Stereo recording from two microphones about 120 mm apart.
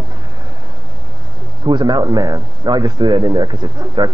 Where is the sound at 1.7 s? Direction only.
40° right (ahead or behind).